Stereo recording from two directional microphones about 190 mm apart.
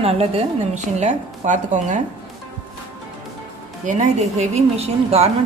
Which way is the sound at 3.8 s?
35° right (ahead or behind).